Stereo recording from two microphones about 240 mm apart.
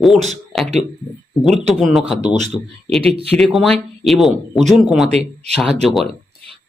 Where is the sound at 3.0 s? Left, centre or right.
Right.